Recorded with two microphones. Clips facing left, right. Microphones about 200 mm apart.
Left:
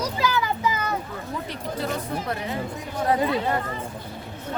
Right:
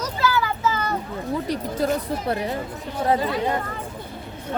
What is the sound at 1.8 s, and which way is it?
Speech, 45° right (ahead or behind).